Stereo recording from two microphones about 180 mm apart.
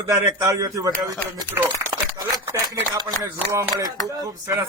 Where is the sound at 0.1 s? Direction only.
20° right (ahead or behind).